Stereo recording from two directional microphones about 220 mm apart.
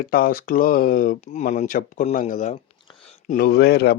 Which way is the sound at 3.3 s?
45° left (ahead or behind).